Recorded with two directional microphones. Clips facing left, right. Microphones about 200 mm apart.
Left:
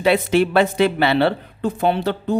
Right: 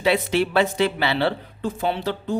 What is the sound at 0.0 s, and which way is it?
A man's voice, 50° left (ahead or behind).